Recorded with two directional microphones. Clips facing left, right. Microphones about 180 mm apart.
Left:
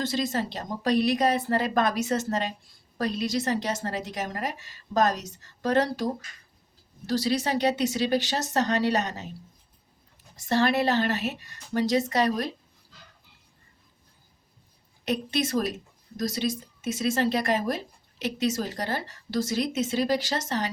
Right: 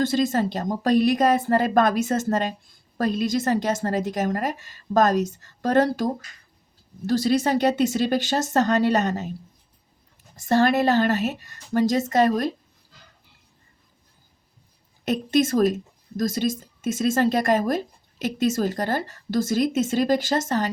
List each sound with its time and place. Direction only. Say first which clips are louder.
0.0 s speech: right 6 dB; 50° right (ahead or behind)
7.1 s speech: right 5 dB; 50° right (ahead or behind)
10.3 s speech: right 4 dB; 45° right (ahead or behind)
15.0 s speech: right 6 dB; 45° right (ahead or behind)